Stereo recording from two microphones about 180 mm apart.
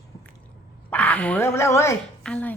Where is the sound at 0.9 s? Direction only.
10° left (ahead or behind).